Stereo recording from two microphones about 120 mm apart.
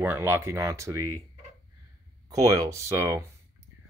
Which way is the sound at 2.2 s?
30° right (ahead or behind).